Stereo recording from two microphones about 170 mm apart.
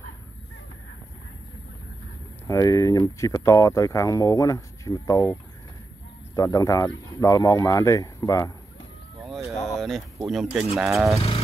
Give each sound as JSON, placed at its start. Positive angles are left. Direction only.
{"t": 2.4, "sound": "speech", "side_deg": 20}
{"t": 9.8, "sound": "speech", "side_deg": 0}
{"t": 11.1, "sound": "vehicle", "side_deg": 35}